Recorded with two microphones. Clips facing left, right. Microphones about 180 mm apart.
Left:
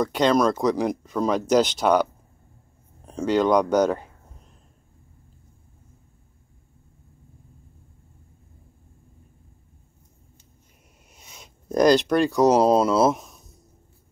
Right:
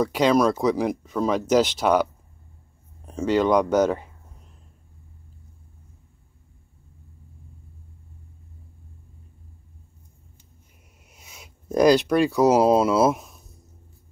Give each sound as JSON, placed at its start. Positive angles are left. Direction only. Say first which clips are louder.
{"t": 0.0, "sound": "speech", "louder": "right 1 dB", "side_deg": -5}
{"t": 3.1, "sound": "speech", "louder": "even", "side_deg": -5}
{"t": 11.1, "sound": "speech", "louder": "even", "side_deg": -5}